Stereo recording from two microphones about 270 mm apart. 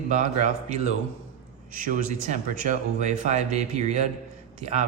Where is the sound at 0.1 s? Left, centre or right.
Right.